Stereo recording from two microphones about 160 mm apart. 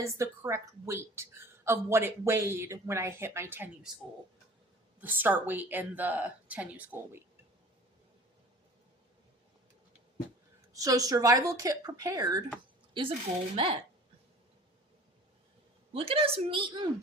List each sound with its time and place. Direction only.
0.0 s a woman's voice: 15° right (ahead or behind)
4.9 s a woman's voice: 10° right (ahead or behind)
10.7 s speech: 20° right (ahead or behind)
15.9 s a woman's voice: 35° right (ahead or behind)